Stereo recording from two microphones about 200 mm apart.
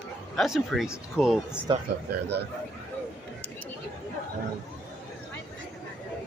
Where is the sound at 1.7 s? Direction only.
25° right (ahead or behind).